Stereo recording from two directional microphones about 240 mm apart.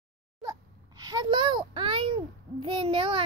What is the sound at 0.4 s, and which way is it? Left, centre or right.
A child's voice, centre.